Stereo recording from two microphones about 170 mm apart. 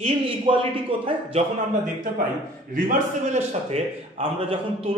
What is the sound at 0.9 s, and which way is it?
Speech, 30° right (ahead or behind).